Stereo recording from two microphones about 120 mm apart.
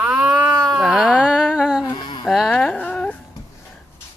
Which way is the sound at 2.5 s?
10° left (ahead or behind).